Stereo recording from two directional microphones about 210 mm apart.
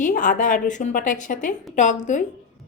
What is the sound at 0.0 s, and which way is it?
A woman's voice, 40° left (ahead or behind).